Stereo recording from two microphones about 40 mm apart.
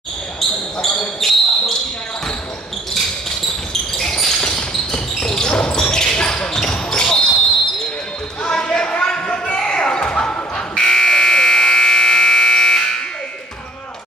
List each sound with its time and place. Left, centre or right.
0.4 s basketball bounce: centre
3.9 s a sound: centre
5.6 s basketball bounce: centre
8.5 s basketball bounce: centre
9.0 s a sound: left
9.6 s buzzer: left